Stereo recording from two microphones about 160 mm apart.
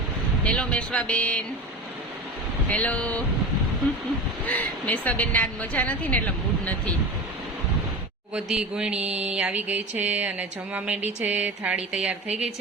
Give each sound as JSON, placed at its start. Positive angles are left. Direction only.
{"t": 0.4, "sound": "a woman's voice", "side_deg": 5}
{"t": 2.6, "sound": "a woman's voice", "side_deg": 10}
{"t": 4.4, "sound": "a woman's voice", "side_deg": 10}
{"t": 8.3, "sound": "a man's voice", "side_deg": -5}
{"t": 9.0, "sound": "mantra", "side_deg": -40}
{"t": 9.3, "sound": "a sound", "side_deg": -5}